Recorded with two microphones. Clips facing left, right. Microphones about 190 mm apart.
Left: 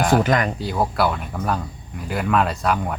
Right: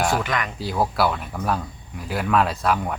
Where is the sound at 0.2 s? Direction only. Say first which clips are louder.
Left 7 dB; 40° left (ahead or behind).